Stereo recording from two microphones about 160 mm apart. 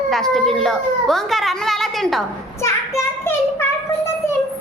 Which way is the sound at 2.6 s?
15° left (ahead or behind).